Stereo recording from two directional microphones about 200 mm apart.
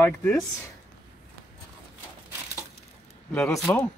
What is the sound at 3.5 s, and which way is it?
Speech, centre (ahead or behind).